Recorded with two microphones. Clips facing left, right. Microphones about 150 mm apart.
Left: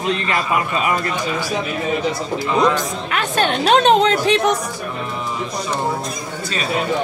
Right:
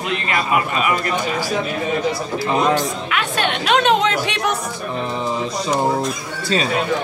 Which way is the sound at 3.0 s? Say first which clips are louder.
Left 2 dB; 40° left (ahead or behind).